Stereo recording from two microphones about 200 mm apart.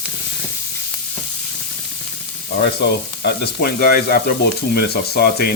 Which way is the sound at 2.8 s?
55° left (ahead or behind).